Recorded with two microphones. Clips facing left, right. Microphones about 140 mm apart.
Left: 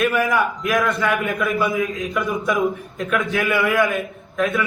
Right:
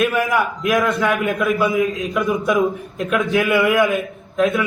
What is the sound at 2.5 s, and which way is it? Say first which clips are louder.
A man's voice: right 3 dB; 20° right (ahead or behind).